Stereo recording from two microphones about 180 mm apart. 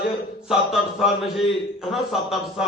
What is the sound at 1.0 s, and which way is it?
A man's voice, centre (ahead or behind).